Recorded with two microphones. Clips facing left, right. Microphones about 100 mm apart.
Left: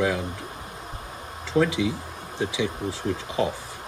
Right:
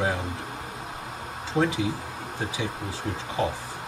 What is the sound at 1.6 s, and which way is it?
Speech, 35° right (ahead or behind).